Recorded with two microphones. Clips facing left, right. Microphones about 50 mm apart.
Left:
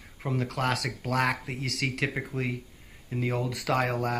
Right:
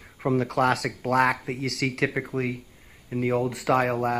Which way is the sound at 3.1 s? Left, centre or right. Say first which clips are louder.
Right 5 dB; right.